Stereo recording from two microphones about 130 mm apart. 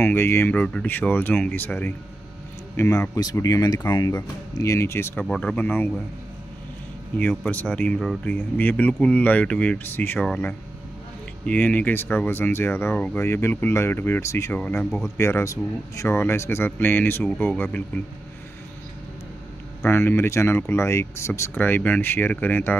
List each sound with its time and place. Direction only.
0.0 s speech: 15° left (ahead or behind)
5.2 s speech: 10° left (ahead or behind)
7.2 s speech: 10° left (ahead or behind)
19.9 s speech: 20° left (ahead or behind)